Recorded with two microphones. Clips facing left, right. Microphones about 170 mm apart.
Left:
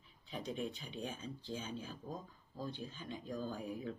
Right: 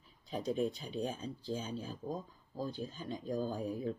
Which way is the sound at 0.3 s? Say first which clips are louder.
Right 7 dB; 40° right (ahead or behind).